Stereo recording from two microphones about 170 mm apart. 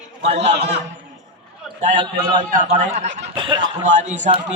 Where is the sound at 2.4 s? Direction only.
50° right (ahead or behind).